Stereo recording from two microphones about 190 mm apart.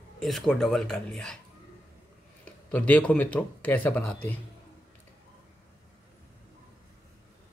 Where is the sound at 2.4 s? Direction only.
5° left (ahead or behind).